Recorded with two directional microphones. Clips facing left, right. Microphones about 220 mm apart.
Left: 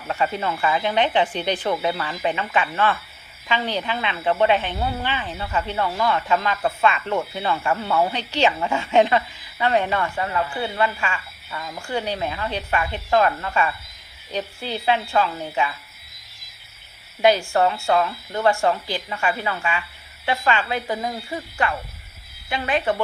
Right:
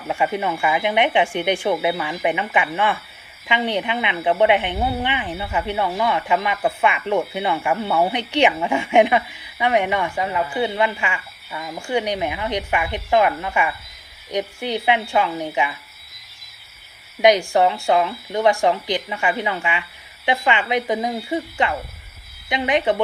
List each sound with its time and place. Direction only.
0.1 s speech: 15° right (ahead or behind)
17.2 s speech: 15° right (ahead or behind)